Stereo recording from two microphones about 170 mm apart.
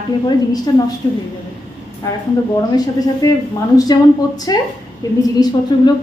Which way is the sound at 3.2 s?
20° left (ahead or behind).